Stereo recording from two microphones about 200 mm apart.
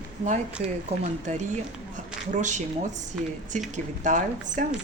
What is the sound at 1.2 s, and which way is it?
A woman's voice, 35° right (ahead or behind).